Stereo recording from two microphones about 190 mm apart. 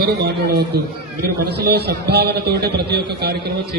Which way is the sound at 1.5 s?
60° right (ahead or behind).